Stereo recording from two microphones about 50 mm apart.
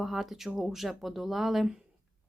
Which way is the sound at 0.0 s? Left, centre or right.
Centre.